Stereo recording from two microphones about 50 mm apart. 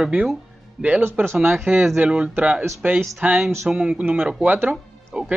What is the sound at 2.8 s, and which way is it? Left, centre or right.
Speech, right.